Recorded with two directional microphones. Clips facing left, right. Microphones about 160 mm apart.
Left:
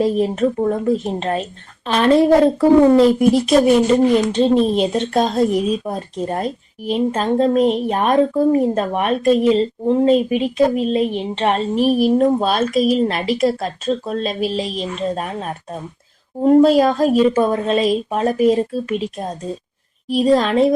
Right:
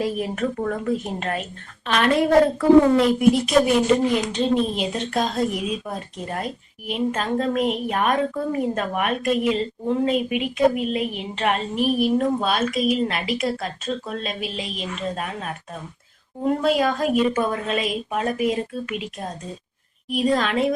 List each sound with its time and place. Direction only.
0.0 s a woman's voice: 25° left (ahead or behind)